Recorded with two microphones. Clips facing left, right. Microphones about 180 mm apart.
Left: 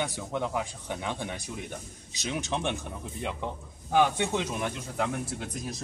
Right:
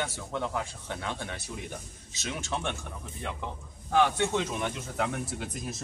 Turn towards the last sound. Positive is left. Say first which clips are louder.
# left 1 dB
turn(degrees=0)  # may be behind; listen again after turning